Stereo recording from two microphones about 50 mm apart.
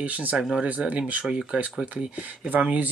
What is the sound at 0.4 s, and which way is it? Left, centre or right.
Speech, centre.